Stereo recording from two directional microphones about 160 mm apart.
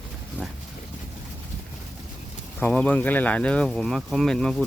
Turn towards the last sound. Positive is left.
turn(degrees=5)  # may be behind; listen again after turning